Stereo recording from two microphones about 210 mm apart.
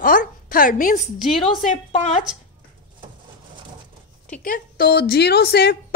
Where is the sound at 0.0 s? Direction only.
40° left (ahead or behind).